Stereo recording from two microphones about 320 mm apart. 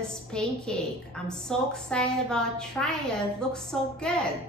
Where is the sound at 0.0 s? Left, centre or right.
Centre.